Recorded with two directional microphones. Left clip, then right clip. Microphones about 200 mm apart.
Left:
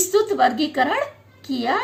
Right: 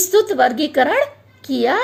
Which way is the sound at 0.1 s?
45° right (ahead or behind).